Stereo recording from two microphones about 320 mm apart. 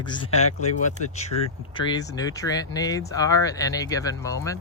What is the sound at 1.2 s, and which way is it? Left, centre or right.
Speech, centre.